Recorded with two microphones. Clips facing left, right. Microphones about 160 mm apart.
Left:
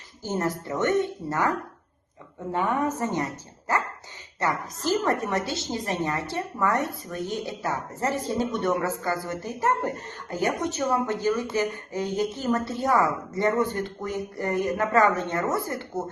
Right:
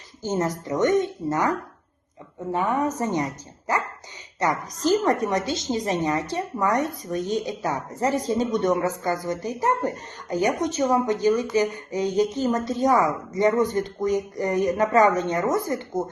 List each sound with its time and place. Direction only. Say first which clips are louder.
0.2 s a woman's voice: right 3 dB; 15° right (ahead or behind)
3.0 s a woman's voice: right 2 dB; 15° right (ahead or behind)
4.4 s a woman's voice: right 3 dB; 15° right (ahead or behind)